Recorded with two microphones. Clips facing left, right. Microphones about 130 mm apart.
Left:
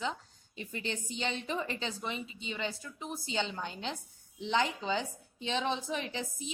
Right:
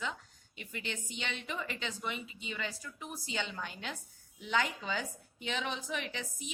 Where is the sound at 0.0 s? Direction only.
35° left (ahead or behind).